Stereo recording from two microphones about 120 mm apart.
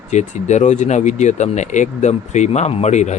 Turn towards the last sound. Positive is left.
turn(degrees=75)  # may be behind; listen again after turning